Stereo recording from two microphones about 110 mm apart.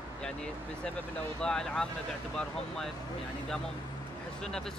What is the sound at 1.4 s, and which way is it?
Speech, 5° left (ahead or behind).